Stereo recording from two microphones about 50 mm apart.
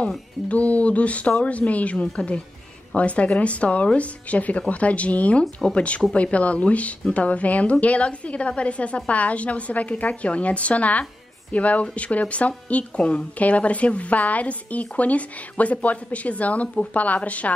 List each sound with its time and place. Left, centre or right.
0.5 s a woman's voice: left
5.4 s speech: centre
5.8 s a woman's voice: left